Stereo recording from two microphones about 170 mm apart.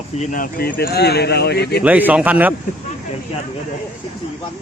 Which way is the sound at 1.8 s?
10° right (ahead or behind).